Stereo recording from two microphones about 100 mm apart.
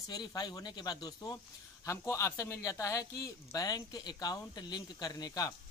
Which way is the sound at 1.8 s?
30° left (ahead or behind).